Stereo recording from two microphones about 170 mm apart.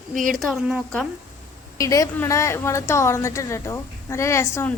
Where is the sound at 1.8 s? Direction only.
20° left (ahead or behind).